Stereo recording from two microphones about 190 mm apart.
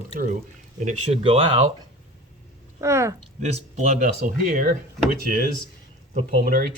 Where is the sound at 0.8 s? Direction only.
35° right (ahead or behind).